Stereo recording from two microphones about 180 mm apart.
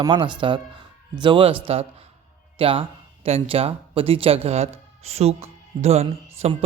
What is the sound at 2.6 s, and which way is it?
Speech, 30° right (ahead or behind).